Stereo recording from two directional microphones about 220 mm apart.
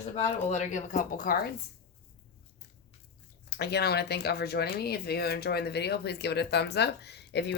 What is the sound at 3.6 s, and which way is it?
Speech, 45° left (ahead or behind).